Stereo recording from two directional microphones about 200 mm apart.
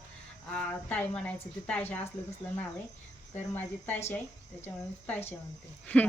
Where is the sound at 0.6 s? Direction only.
5° left (ahead or behind).